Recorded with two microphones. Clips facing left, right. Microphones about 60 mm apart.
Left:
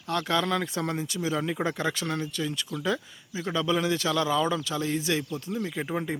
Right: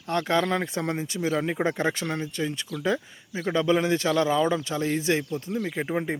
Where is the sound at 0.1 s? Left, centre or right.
Right.